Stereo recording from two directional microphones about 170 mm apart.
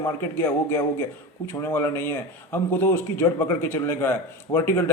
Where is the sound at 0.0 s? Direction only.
15° left (ahead or behind).